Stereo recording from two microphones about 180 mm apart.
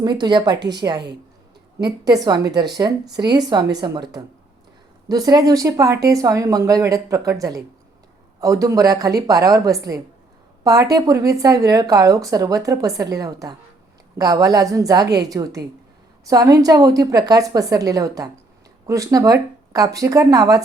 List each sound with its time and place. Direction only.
0.0 s a woman's voice: 25° right (ahead or behind)
5.0 s a woman's voice: 20° right (ahead or behind)